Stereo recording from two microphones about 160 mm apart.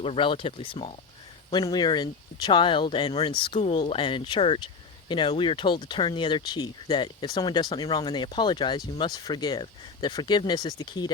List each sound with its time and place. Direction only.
0.0 s speech: 35° left (ahead or behind)